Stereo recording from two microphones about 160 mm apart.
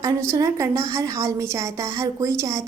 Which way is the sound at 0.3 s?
20° right (ahead or behind).